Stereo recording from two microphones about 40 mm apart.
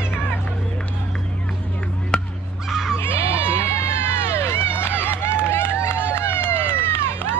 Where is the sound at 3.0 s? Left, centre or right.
Left.